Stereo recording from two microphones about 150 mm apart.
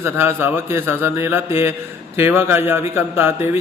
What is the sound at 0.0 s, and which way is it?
A man's voice, 15° right (ahead or behind).